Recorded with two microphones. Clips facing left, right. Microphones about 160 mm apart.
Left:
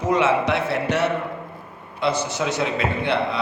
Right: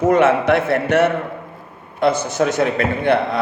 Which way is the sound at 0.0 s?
50° right (ahead or behind).